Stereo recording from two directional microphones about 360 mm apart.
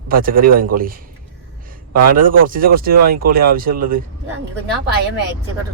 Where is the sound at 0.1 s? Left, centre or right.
Right.